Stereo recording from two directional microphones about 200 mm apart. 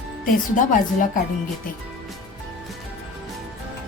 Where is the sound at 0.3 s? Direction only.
40° left (ahead or behind).